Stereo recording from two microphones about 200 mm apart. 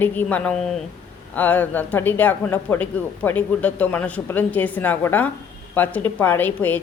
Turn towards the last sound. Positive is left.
turn(degrees=10)  # may be behind; listen again after turning